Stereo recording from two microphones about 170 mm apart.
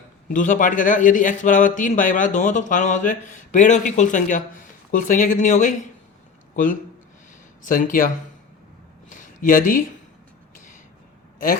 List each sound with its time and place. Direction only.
0.3 s a man's voice: 50° left (ahead or behind)
7.6 s a man's voice: 50° left (ahead or behind)
9.0 s a sound: 50° left (ahead or behind)